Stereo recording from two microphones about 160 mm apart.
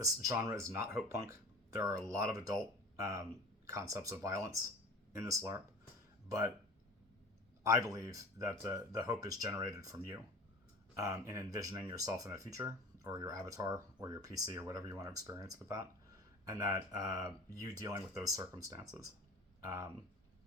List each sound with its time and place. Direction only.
0.0 s speech: 20° right (ahead or behind)
1.3 s a sound: 20° right (ahead or behind)
2.0 s speech: 20° right (ahead or behind)
7.6 s speech: 20° right (ahead or behind)